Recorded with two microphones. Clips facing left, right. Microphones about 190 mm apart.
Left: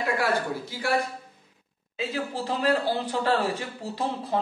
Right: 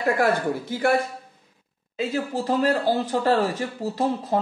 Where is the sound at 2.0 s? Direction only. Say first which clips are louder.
Right 4 dB; 45° right (ahead or behind).